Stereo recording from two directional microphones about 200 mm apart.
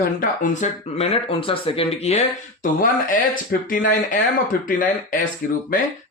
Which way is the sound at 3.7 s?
45° left (ahead or behind).